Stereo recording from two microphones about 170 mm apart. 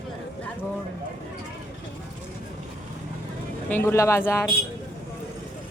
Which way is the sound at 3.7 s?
15° left (ahead or behind).